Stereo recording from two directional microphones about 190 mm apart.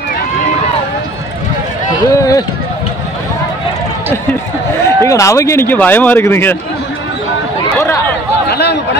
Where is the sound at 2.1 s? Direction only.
20° left (ahead or behind).